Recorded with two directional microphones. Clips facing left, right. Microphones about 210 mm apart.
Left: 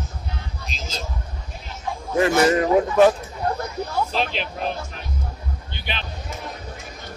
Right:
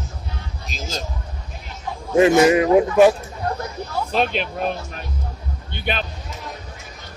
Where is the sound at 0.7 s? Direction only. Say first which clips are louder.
Right 4 dB; 45° right (ahead or behind).